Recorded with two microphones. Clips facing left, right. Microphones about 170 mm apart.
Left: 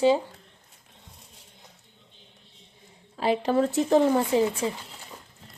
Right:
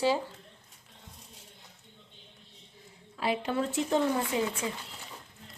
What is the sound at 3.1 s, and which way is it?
Speech, 35° left (ahead or behind).